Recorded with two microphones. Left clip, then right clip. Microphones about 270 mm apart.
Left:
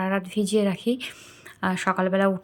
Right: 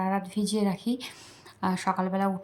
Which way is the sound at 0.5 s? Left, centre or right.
Centre.